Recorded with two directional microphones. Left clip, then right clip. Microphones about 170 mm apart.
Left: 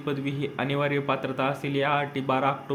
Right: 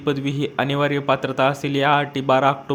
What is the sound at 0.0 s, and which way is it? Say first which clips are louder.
A man's voice: right 7 dB; 35° right (ahead or behind).